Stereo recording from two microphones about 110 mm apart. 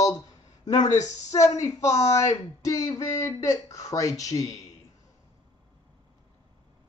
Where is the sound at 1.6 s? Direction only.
90° left.